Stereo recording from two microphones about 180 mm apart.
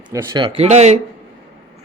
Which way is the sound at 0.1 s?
20° right (ahead or behind).